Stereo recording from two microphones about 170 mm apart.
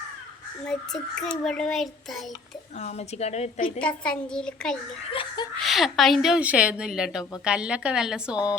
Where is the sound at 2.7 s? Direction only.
40° left (ahead or behind).